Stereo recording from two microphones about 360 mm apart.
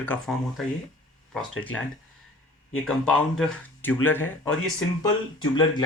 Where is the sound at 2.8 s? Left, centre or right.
Centre.